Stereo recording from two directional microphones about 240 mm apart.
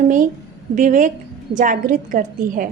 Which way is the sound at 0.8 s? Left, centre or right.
Right.